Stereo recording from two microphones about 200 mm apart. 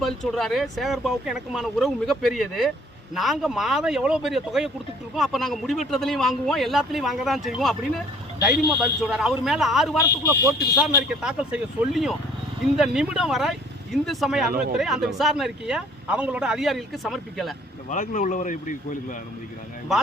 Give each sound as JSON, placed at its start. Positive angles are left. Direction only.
{"t": 0.0, "sound": "speech", "side_deg": 0}
{"t": 17.8, "sound": "speech", "side_deg": 40}